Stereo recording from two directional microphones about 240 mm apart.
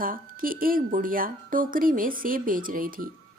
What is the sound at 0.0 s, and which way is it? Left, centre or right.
Speech, right.